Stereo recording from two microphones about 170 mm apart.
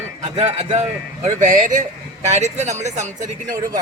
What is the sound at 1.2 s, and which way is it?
Speech, 50° right (ahead or behind).